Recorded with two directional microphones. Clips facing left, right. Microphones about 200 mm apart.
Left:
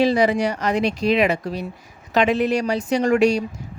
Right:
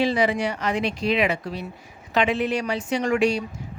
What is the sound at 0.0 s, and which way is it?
Speech, 40° left (ahead or behind).